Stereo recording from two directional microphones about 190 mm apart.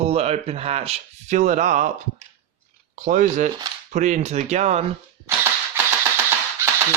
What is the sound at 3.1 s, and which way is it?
Speech, 40° right (ahead or behind).